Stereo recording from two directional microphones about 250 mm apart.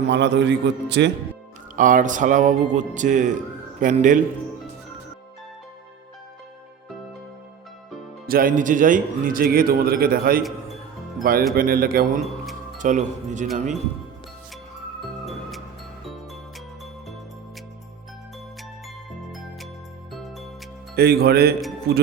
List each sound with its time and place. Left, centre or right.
0.1 s a man's voice: right
1.7 s a man's voice: right
8.3 s a man's voice: right
15.3 s music: centre
20.9 s a man's voice: right